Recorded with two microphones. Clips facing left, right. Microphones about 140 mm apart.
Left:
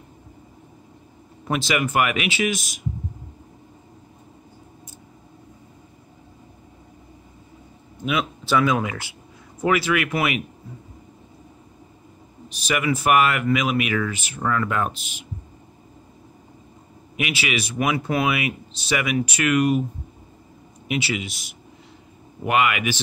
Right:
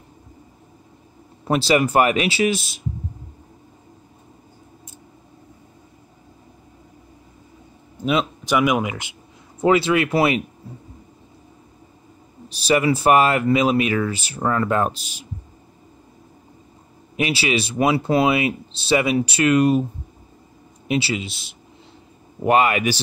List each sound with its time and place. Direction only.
1.4 s speech: 35° right (ahead or behind)
8.0 s speech: 30° right (ahead or behind)
8.5 s speech: 15° right (ahead or behind); by 10.4 s 30° right (ahead or behind)
12.4 s speech: 35° right (ahead or behind)
17.2 s speech: 30° right (ahead or behind)
20.9 s speech: 30° right (ahead or behind)